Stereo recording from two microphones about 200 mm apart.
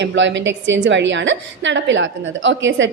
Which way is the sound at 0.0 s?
65° right (ahead or behind).